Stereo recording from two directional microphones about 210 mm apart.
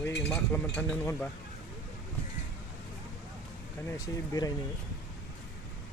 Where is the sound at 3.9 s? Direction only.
15° left (ahead or behind).